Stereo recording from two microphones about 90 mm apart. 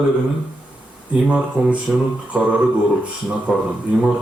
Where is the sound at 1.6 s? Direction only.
5° right (ahead or behind).